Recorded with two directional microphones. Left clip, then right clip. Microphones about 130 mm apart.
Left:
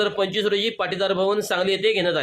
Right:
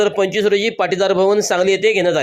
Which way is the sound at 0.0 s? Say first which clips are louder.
Right 6 dB; 30° right (ahead or behind).